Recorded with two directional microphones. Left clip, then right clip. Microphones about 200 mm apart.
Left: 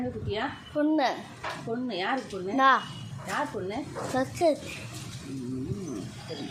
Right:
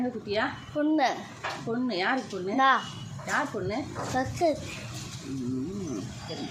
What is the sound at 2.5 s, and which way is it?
Speech, 10° left (ahead or behind).